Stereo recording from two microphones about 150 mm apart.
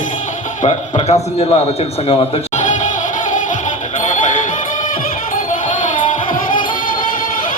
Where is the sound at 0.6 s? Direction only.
45° left (ahead or behind).